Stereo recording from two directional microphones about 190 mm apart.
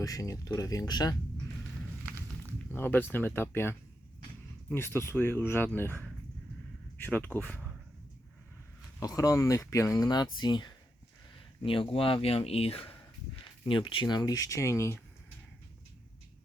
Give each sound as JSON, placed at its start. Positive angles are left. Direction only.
{"t": 0.0, "sound": "speech", "side_deg": 20}
{"t": 2.0, "sound": "a sound", "side_deg": -10}
{"t": 2.7, "sound": "speech", "side_deg": 10}
{"t": 9.0, "sound": "speech", "side_deg": 20}